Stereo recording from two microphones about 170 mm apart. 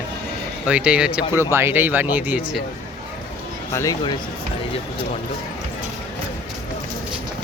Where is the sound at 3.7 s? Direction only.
20° left (ahead or behind).